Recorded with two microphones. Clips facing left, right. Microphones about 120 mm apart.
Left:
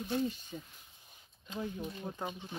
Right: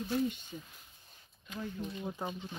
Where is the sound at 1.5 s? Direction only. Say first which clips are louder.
Left 1 dB; 25° left (ahead or behind).